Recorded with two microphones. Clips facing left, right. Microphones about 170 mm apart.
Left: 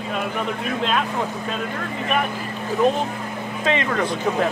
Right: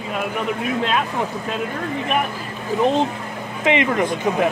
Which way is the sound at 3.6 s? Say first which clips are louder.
Right 4 dB; 15° right (ahead or behind).